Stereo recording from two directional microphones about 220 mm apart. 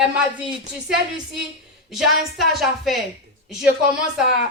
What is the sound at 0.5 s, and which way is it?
Speech, 5° right (ahead or behind).